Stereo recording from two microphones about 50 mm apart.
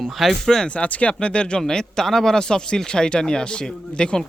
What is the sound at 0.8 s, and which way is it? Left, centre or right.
Speech, left.